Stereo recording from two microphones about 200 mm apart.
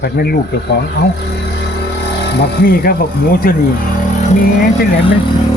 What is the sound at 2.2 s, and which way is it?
Speech, 55° left (ahead or behind).